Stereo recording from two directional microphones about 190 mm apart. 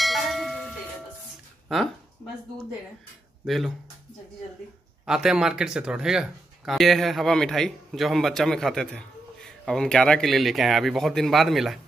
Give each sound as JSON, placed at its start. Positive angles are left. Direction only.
{"t": 0.0, "sound": "cowbell", "side_deg": 0}
{"t": 3.4, "sound": "speech", "side_deg": 0}
{"t": 5.0, "sound": "speech", "side_deg": -5}